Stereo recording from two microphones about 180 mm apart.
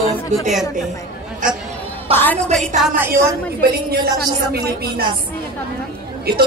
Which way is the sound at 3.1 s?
55° right (ahead or behind).